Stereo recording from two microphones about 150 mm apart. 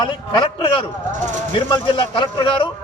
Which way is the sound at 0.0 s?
30° left (ahead or behind).